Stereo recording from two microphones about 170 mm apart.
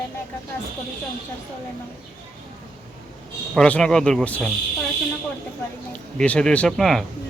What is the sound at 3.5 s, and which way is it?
Speech, 5° left (ahead or behind).